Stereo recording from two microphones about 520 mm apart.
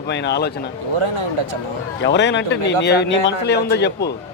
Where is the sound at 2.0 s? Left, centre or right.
Centre.